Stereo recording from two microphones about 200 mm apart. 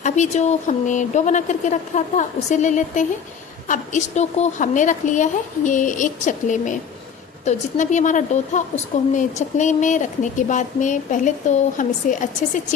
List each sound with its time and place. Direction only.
0.0 s a woman's voice: 35° left (ahead or behind)